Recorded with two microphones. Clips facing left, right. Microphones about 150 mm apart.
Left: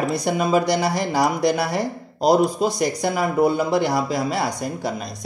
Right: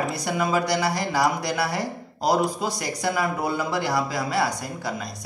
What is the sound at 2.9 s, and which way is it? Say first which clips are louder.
Speech: left 5 dB; 25° left (ahead or behind).